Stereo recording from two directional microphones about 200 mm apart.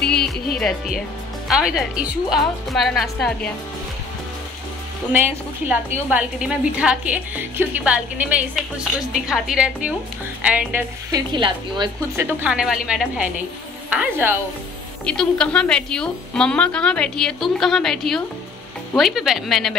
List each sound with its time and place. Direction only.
0.0 s music: centre (ahead or behind)
1.5 s a woman's voice: centre (ahead or behind)
5.7 s a woman's voice: 5° right (ahead or behind)
11.1 s a woman's voice: 20° right (ahead or behind)
12.2 s a woman's voice: 5° right (ahead or behind)
15.0 s a woman's voice: 5° left (ahead or behind)